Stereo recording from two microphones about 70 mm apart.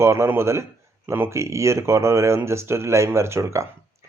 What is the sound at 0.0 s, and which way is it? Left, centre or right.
Speech, right.